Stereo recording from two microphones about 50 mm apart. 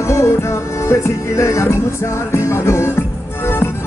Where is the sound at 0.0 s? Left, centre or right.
Left.